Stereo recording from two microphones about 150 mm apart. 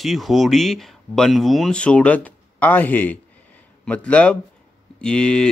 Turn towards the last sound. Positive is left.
turn(degrees=5)  # may be behind; listen again after turning